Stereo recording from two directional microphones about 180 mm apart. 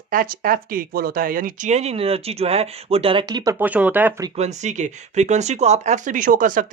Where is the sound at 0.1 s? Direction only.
50° right (ahead or behind); by 4.1 s 10° right (ahead or behind).